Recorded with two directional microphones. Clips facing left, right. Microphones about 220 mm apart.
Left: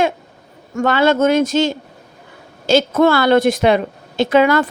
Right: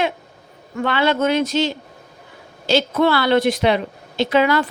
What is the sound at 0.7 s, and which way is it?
A woman's voice, 45° left (ahead or behind).